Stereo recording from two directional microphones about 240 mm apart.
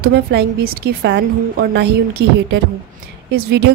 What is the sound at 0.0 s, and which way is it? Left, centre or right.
A woman's voice, right.